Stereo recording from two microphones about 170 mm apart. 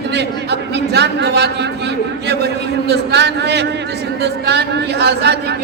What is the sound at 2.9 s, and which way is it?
A man's voice, 80° right.